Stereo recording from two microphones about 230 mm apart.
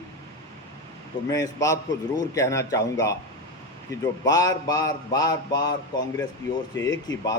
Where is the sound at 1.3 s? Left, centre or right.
Centre.